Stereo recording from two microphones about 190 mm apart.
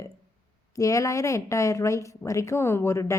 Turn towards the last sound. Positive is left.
turn(degrees=15)  # may be behind; listen again after turning